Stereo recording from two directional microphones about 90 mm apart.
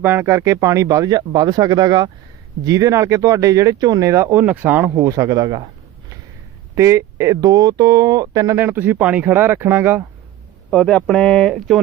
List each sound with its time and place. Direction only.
0.0 s speech: 25° right (ahead or behind); by 4.1 s 45° right (ahead or behind)
4.1 s speech: 25° right (ahead or behind)
5.0 s speech: 40° right (ahead or behind)
6.7 s speech: 30° right (ahead or behind)
8.5 s speech: 25° right (ahead or behind)
10.7 s speech: 15° left (ahead or behind)